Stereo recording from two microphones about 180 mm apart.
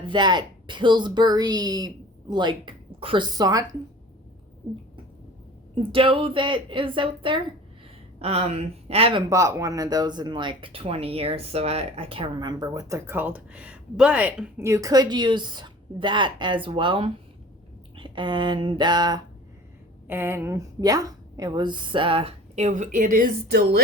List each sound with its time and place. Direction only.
0.1 s speech: 25° right (ahead or behind)
5.7 s speech: 30° right (ahead or behind)
9.3 s speech: 20° right (ahead or behind)
14.7 s speech: 20° right (ahead or behind)
20.1 s speech: 10° right (ahead or behind); by 23.8 s 65° right (ahead or behind)